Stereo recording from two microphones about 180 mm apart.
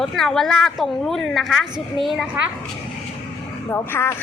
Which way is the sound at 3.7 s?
15° left (ahead or behind).